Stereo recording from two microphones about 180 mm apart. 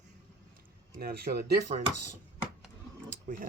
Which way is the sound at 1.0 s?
60° right (ahead or behind).